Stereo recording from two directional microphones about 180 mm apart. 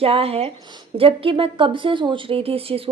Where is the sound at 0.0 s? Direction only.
30° right (ahead or behind).